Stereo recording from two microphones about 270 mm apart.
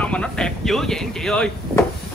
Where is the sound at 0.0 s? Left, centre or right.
Centre.